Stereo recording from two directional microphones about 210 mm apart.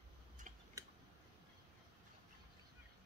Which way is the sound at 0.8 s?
15° right (ahead or behind).